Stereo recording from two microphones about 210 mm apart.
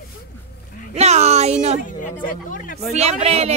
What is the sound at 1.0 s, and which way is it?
Speech, 30° right (ahead or behind).